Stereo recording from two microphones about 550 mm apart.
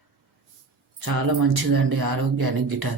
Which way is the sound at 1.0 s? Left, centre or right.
Right.